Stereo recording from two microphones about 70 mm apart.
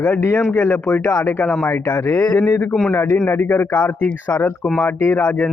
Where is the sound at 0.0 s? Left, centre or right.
Left.